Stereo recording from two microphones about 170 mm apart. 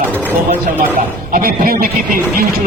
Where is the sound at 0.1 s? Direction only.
10° left (ahead or behind).